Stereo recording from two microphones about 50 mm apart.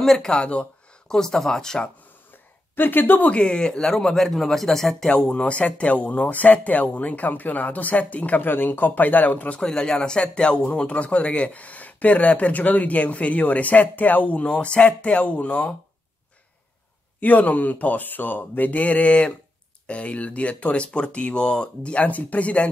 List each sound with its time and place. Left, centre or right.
0.0 s speech: centre
0.5 s a sound: left
1.1 s speech: centre
2.7 s speech: left
3.3 s speech: centre
3.9 s speech: centre; by 8.4 s left
8.4 s speech: left
9.6 s speech: centre
17.2 s speech: left